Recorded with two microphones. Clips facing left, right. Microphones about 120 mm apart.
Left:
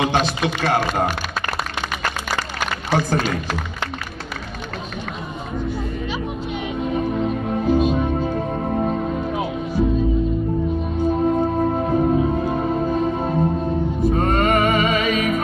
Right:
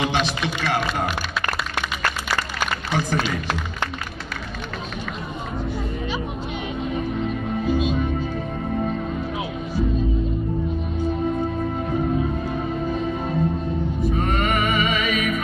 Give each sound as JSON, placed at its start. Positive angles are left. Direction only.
{"t": 0.0, "sound": "a man's voice", "side_deg": 45}
{"t": 2.9, "sound": "a man's voice", "side_deg": 45}
{"t": 7.2, "sound": "music", "side_deg": 40}
{"t": 11.2, "sound": "music", "side_deg": 40}